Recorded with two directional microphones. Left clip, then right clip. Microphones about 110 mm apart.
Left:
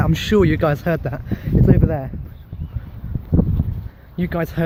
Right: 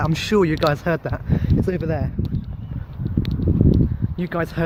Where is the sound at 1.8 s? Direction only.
25° right (ahead or behind).